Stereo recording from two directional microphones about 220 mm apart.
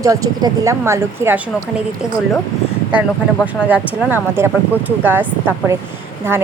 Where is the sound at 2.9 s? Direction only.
5° right (ahead or behind).